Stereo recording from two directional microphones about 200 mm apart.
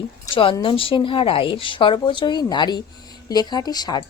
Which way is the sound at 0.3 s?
25° left (ahead or behind).